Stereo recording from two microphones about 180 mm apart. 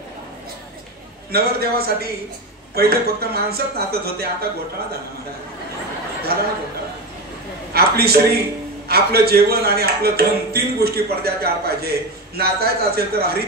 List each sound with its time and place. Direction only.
1.3 s a man's voice: 60° right (ahead or behind)
7.7 s a man's voice: 60° right (ahead or behind)